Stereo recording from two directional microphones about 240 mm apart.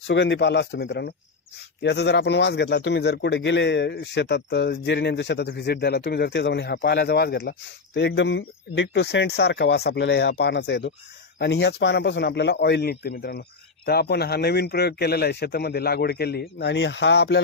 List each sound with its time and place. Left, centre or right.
0.0 s a man's voice: left